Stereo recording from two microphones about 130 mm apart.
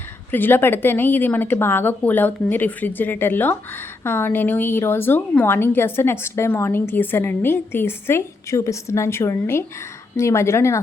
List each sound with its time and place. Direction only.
0.3 s a woman's voice: 15° left (ahead or behind)